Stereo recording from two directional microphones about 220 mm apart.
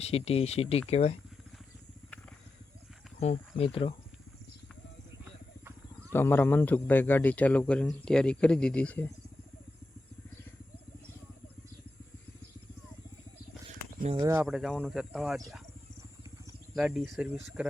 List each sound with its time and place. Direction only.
0.0 s speech: 25° left (ahead or behind)
3.2 s speech: 30° left (ahead or behind)
6.1 s speech: 10° left (ahead or behind)
14.2 s speech: 15° right (ahead or behind)
14.4 s speech: centre (ahead or behind)
16.7 s speech: centre (ahead or behind)